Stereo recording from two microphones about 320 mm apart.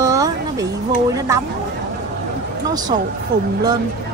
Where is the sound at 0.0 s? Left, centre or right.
Centre.